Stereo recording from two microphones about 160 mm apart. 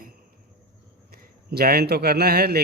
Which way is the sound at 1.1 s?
75° right (ahead or behind).